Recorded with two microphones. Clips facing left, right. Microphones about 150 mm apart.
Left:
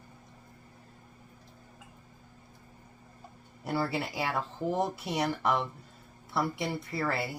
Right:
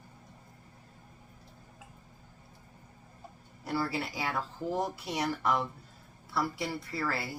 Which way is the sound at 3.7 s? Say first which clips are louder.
Left 2 dB; 25° left (ahead or behind).